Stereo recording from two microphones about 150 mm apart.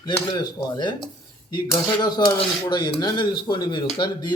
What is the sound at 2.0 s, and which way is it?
Speech, 25° left (ahead or behind).